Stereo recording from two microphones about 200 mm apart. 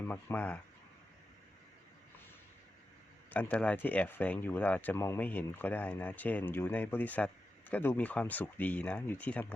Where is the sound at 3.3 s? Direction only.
5° left (ahead or behind).